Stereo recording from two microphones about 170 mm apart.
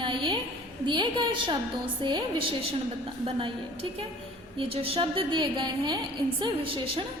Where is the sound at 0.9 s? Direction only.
30° right (ahead or behind).